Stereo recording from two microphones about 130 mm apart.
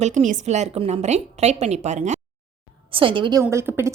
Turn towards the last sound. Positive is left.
turn(degrees=-20)  # may be behind; listen again after turning